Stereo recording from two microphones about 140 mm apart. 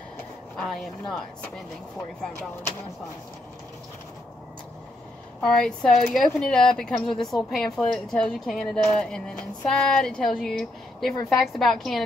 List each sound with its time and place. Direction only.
0.6 s a woman's voice: 5° left (ahead or behind)
5.4 s a woman's voice: 5° left (ahead or behind)